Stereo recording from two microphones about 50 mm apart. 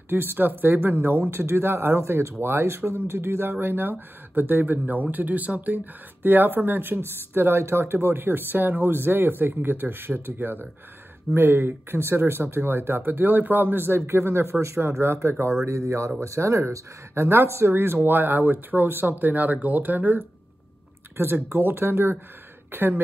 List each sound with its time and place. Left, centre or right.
0.1 s speech: right
2.0 s speech: right
15.6 s speech: right
16.2 s speech: right
21.5 s speech: right